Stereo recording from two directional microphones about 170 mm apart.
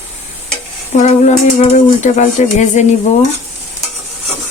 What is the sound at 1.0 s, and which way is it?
Speech, 45° left (ahead or behind).